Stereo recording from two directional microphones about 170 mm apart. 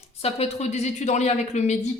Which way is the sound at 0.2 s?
35° left (ahead or behind).